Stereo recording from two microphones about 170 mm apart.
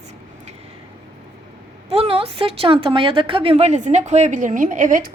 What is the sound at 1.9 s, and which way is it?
Speech, 35° right (ahead or behind).